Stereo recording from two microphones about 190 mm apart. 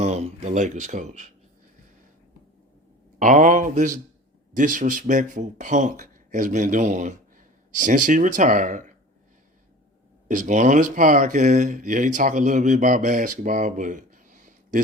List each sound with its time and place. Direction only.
0.0 s speech: 35° right (ahead or behind)
3.2 s speech: 45° right (ahead or behind)
10.2 s speech: 40° right (ahead or behind)